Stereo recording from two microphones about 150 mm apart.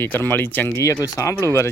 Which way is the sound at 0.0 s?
15° left (ahead or behind).